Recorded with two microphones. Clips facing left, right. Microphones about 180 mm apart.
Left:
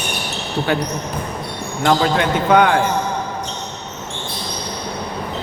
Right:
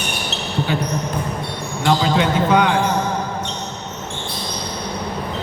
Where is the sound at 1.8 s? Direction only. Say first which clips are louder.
Left 1 dB; 55° left (ahead or behind).